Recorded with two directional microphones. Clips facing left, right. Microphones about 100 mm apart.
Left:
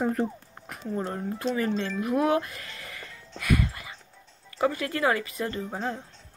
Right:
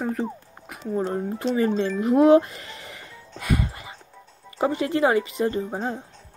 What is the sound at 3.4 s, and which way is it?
Music, 25° right (ahead or behind).